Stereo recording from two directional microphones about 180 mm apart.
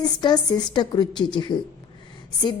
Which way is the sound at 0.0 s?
25° left (ahead or behind).